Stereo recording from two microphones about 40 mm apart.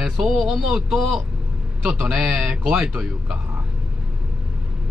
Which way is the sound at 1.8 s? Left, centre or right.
Right.